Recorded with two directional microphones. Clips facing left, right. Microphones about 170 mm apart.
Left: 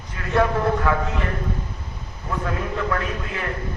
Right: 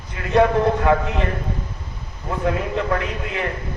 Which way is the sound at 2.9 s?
20° right (ahead or behind).